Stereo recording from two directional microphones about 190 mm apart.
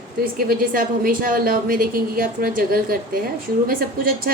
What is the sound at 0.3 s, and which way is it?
A woman's voice, 50° right (ahead or behind).